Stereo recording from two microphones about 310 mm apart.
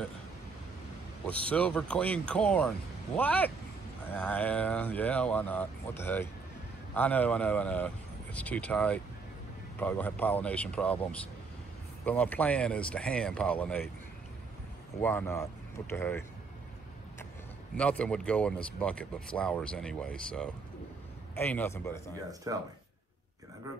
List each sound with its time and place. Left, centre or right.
1.5 s speech: centre
15.0 s speech: centre
17.7 s speech: centre
22.5 s speech: centre